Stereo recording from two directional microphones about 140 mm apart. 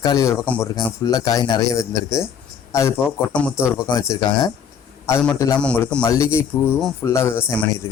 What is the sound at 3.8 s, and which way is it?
Speech, 25° left (ahead or behind).